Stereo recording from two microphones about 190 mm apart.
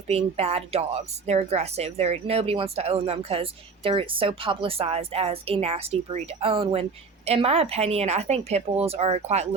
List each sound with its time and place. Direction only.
0.1 s speech: 35° right (ahead or behind)